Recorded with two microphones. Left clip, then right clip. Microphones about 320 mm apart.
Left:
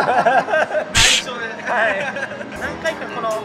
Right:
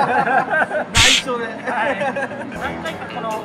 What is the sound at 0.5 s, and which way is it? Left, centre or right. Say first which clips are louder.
Snicker: even; centre.